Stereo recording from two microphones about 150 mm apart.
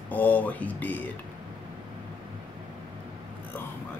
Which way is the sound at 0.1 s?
10° left (ahead or behind).